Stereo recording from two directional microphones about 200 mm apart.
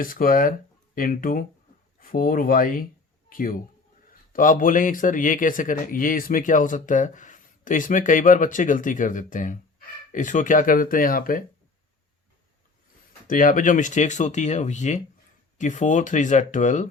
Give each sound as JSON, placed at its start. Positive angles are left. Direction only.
{"t": 0.0, "sound": "speech", "side_deg": 45}
{"t": 13.2, "sound": "speech", "side_deg": 40}